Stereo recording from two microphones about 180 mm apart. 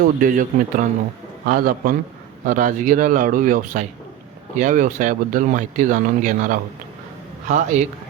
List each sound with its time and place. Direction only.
0.0 s speech: 50° right (ahead or behind)